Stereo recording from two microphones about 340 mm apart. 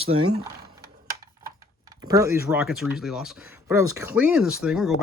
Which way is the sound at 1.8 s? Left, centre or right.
Centre.